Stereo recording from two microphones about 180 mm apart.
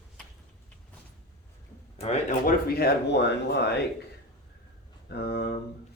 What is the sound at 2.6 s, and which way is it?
Speech, 60° left (ahead or behind).